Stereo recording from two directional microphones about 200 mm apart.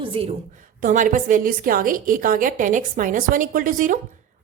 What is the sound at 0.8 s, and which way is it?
A woman's voice, 40° right (ahead or behind).